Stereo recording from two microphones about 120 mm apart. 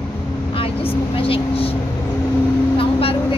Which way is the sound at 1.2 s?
50° left (ahead or behind).